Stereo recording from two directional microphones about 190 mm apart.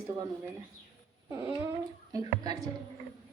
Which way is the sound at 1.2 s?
15° right (ahead or behind).